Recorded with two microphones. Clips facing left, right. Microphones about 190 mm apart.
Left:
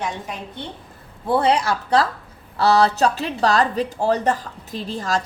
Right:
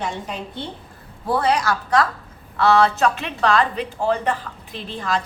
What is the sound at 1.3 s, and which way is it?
A woman's voice, 25° left (ahead or behind).